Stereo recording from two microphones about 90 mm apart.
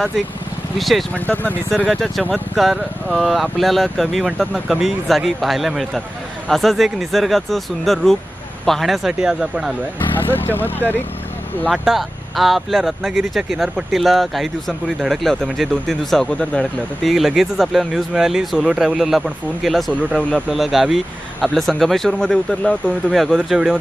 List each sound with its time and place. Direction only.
0.7 s speech: centre (ahead or behind)
1.1 s speech: 20° left (ahead or behind)
1.9 s speech: 5° left (ahead or behind)
10.1 s speech: 25° left (ahead or behind)
11.7 s speech: 5° right (ahead or behind)